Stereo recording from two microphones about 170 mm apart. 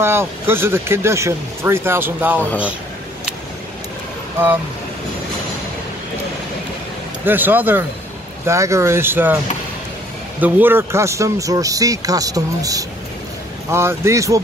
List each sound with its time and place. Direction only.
0.0 s speech: 15° right (ahead or behind)
7.2 s speech: 10° right (ahead or behind)
10.4 s speech: 10° right (ahead or behind)